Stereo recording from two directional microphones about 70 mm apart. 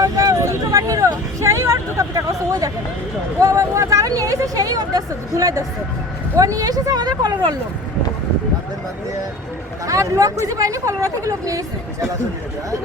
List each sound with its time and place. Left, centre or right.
0.0 s vehicle: right
3.4 s speech: right
9.8 s speech: right